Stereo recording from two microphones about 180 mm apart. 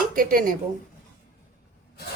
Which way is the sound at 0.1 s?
50° right (ahead or behind).